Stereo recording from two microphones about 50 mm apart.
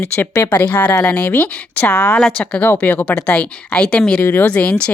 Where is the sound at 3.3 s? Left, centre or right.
Left.